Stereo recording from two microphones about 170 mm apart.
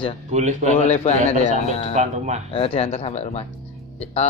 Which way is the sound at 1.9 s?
45° right (ahead or behind).